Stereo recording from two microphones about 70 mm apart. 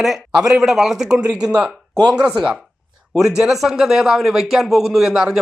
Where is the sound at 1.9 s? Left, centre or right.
Right.